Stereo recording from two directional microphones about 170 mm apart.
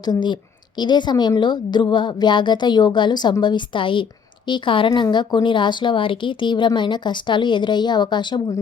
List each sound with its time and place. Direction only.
0.0 s a woman's voice: 25° left (ahead or behind)